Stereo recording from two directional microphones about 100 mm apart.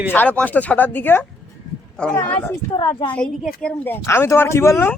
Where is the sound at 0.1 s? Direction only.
15° left (ahead or behind).